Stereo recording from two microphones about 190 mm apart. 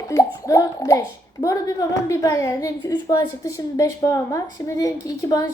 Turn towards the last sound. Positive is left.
turn(degrees=20)  # may be behind; listen again after turning